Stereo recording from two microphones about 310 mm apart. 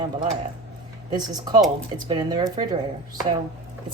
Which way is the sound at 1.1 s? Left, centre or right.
Centre.